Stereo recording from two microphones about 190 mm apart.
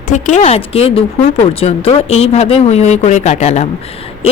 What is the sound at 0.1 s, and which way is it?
A woman's voice, 40° left (ahead or behind).